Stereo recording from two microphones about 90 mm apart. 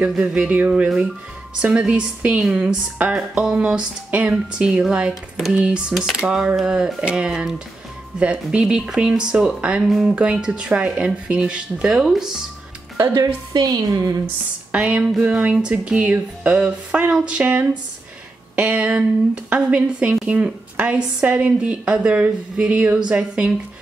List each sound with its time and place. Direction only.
0.1 s speech: 10° right (ahead or behind)
10.1 s speech: 10° right (ahead or behind)
12.9 s a woman's voice: 35° right (ahead or behind)
13.5 s a woman's voice: 50° right (ahead or behind)
14.7 s speech: 10° right (ahead or behind)